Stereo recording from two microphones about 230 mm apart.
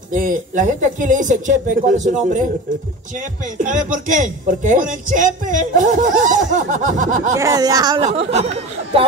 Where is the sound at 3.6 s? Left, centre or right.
Right.